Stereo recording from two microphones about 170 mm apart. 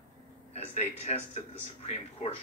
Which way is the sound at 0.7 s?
40° left (ahead or behind).